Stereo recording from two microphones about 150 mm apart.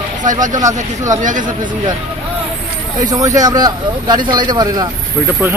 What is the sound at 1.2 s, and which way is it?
Speech, 60° right (ahead or behind).